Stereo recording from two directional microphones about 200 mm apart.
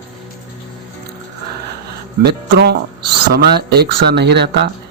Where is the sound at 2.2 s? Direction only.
55° right (ahead or behind).